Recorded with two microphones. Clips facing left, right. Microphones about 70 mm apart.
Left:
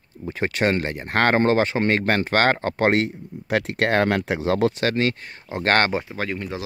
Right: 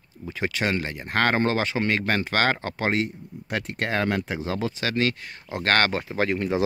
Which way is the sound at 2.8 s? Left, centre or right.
Left.